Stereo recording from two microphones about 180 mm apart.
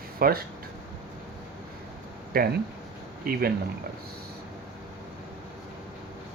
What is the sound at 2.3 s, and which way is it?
Speech, 55° right (ahead or behind).